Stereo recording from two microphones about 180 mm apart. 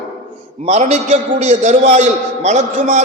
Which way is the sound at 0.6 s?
40° right (ahead or behind).